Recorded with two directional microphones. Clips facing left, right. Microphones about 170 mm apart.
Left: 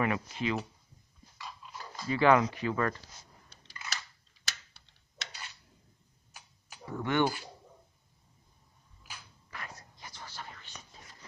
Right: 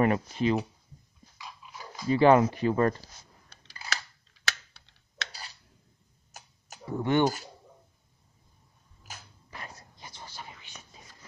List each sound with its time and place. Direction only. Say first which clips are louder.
0.0 s speech: right 6 dB; 40° right (ahead or behind)
1.4 s dog: even; 5° right (ahead or behind)
2.0 s speech: right 5 dB; 30° right (ahead or behind)
3.8 s scissors: right 5 dB; 35° right (ahead or behind)
4.5 s computer keyboard: right 9 dB; 70° right (ahead or behind)
5.3 s a sound: right 2 dB; 35° right (ahead or behind)
6.9 s speech: right 4 dB; 30° right (ahead or behind)
9.0 s dog: right 3 dB; 45° right (ahead or behind)
9.5 s whispering: right 1 dB; 25° right (ahead or behind); by 11.0 s 10° right (ahead or behind)